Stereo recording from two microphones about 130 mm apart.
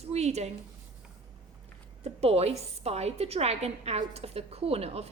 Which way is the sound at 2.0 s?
55° right (ahead or behind).